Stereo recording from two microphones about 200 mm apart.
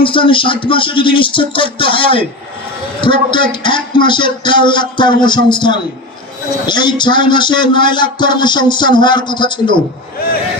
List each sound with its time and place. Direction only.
0.0 s a man's voice: 25° left (ahead or behind)